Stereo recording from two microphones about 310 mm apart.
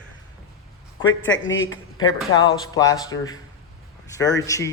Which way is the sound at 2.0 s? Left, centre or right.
Centre.